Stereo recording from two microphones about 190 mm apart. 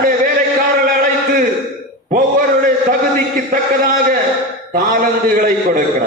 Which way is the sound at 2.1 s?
50° right (ahead or behind).